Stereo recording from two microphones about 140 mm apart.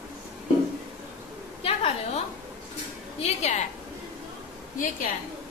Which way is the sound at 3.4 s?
55° left (ahead or behind).